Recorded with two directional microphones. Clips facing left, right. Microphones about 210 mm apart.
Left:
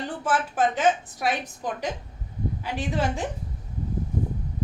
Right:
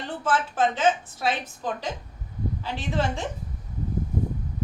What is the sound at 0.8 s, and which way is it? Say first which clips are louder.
A woman's voice: left 1 dB; 15° left (ahead or behind).